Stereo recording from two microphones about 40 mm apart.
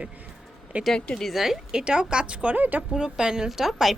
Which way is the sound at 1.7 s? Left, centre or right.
Right.